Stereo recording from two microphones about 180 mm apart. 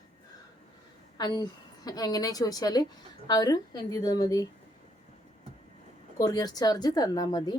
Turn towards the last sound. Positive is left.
turn(degrees=25)  # may be behind; listen again after turning